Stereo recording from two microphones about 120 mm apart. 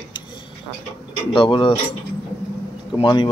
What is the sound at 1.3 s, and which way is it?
Speech, 45° left (ahead or behind).